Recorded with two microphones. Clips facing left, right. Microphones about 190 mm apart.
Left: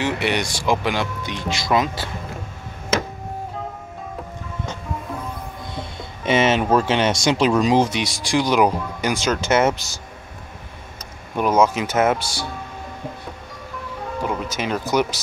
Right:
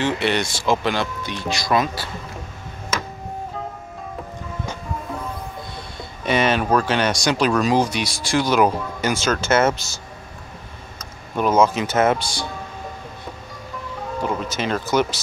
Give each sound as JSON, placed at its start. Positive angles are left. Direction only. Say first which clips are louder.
{"t": 0.0, "sound": "speech", "louder": "right 1 dB", "side_deg": 15}
{"t": 5.8, "sound": "speech", "louder": "left 2 dB", "side_deg": 20}
{"t": 11.3, "sound": "speech", "louder": "even", "side_deg": 10}
{"t": 14.2, "sound": "speech", "louder": "right 1 dB", "side_deg": 10}